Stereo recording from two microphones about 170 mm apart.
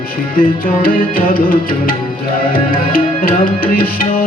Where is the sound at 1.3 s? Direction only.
55° left (ahead or behind).